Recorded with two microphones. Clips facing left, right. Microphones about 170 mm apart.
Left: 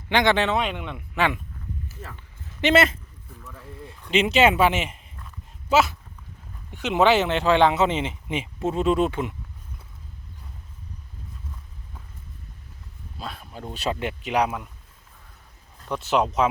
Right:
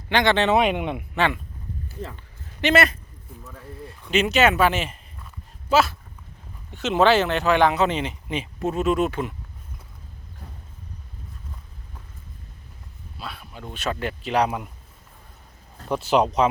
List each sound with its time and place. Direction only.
0.1 s speech: 15° left (ahead or behind)
0.6 s speech: 15° right (ahead or behind)
1.1 s speech: 10° left (ahead or behind)
2.1 s a sound: 20° left (ahead or behind)
4.1 s speech: 25° left (ahead or behind)
13.1 s a sound: 40° left (ahead or behind)
13.4 s speech: 35° left (ahead or behind)
13.9 s speech: 15° left (ahead or behind)
15.9 s speech: centre (ahead or behind)